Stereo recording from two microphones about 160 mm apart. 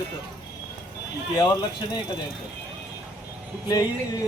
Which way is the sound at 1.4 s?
25° left (ahead or behind).